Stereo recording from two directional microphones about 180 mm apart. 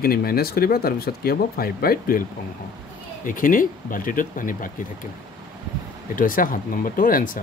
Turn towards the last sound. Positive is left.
turn(degrees=50)  # may be behind; listen again after turning